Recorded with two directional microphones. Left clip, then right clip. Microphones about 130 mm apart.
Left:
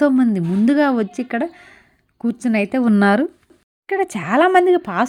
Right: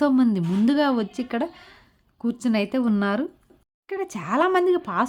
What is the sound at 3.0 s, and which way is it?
Speech, 50° left (ahead or behind).